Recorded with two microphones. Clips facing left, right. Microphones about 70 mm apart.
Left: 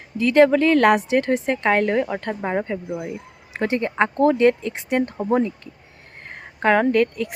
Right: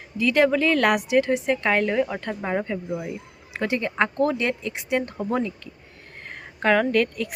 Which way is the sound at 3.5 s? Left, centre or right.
Left.